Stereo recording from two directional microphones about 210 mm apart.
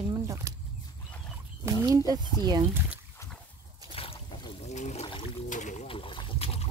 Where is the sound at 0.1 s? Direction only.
15° right (ahead or behind).